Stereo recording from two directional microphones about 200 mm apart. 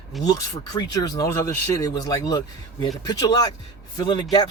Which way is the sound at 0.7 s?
20° left (ahead or behind).